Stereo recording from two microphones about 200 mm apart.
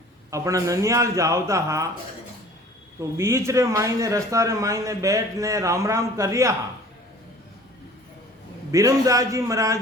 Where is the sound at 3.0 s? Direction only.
15° right (ahead or behind).